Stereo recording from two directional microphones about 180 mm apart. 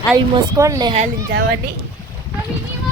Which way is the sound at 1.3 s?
70° right (ahead or behind).